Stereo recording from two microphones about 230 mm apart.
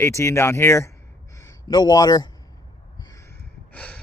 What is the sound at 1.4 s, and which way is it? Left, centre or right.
Speech, centre.